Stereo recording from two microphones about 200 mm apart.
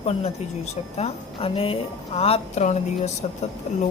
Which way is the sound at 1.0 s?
30° left (ahead or behind).